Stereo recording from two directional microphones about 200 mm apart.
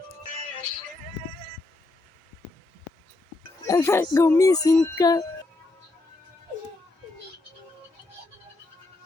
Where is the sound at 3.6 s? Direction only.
15° left (ahead or behind).